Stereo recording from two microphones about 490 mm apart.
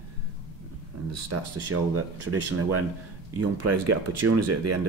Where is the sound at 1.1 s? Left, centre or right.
Right.